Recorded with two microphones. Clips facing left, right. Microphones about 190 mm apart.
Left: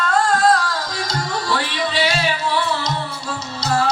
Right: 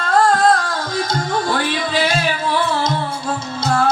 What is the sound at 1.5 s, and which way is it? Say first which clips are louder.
Music: right 3 dB; 50° right (ahead or behind).